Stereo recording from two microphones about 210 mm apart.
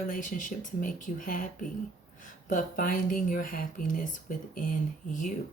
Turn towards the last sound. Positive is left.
turn(degrees=40)  # may be behind; listen again after turning